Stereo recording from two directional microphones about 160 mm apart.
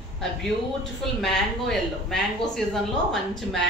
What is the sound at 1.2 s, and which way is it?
Speech, centre (ahead or behind).